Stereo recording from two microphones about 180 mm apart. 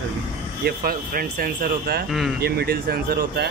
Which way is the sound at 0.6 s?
55° right (ahead or behind).